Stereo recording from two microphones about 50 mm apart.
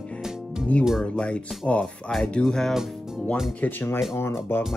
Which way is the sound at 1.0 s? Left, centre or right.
Left.